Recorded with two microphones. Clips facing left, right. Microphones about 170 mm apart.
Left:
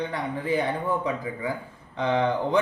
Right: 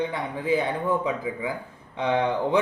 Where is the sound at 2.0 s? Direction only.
5° right (ahead or behind).